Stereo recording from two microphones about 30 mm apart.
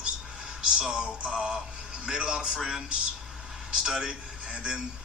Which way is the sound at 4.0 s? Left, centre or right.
Right.